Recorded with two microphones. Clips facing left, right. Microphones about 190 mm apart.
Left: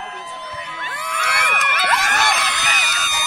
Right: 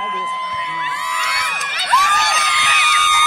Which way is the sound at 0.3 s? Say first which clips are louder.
Right 5 dB; 45° left (ahead or behind).